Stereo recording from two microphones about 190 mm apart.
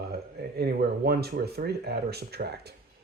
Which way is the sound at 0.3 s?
55° right (ahead or behind).